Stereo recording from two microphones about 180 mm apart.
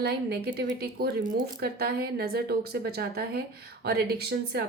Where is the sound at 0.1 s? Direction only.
60° right (ahead or behind).